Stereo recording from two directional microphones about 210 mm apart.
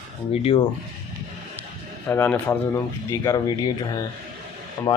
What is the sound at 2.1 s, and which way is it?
Speech, 10° left (ahead or behind).